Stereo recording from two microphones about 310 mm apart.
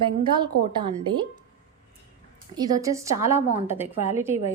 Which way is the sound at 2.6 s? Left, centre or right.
Centre.